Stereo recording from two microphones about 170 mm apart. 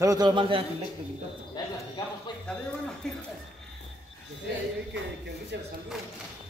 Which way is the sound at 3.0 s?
5° left (ahead or behind).